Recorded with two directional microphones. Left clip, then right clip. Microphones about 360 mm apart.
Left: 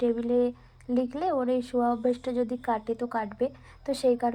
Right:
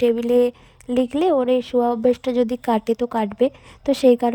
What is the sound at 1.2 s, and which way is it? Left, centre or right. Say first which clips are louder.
A woman's voice: right 11 dB; right.